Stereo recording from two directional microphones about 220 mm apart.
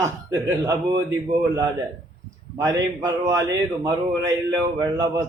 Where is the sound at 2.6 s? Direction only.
15° right (ahead or behind).